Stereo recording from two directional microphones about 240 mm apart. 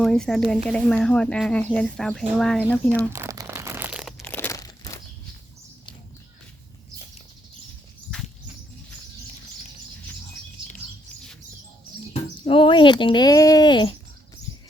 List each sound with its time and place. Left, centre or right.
0.0 s speech: centre
3.1 s crumpling: centre
4.2 s crunch: centre
12.5 s speech: left